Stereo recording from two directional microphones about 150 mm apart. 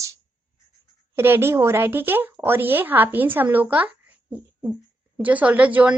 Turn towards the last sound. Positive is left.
turn(degrees=-10)  # may be behind; listen again after turning